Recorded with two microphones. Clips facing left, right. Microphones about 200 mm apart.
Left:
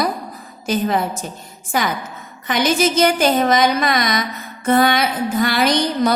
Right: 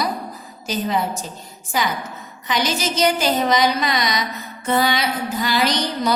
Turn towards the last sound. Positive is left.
turn(degrees=50)  # may be behind; listen again after turning